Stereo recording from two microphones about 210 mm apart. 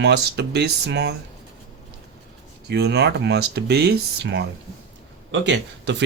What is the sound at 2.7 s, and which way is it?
Speech, 55° right (ahead or behind).